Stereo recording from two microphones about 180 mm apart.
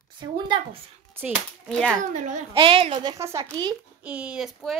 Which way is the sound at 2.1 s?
45° right (ahead or behind).